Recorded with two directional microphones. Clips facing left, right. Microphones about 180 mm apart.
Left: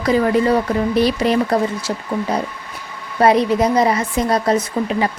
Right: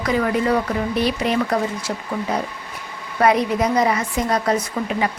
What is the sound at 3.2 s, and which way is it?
A woman's voice, 30° left (ahead or behind).